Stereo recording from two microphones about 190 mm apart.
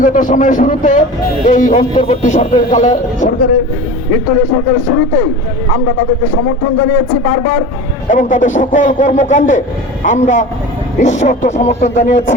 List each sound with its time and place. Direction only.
0.0 s speech: 45° left (ahead or behind)
4.3 s speech: 90° left
6.2 s speech: 90° left
8.0 s a man's voice: 40° left (ahead or behind)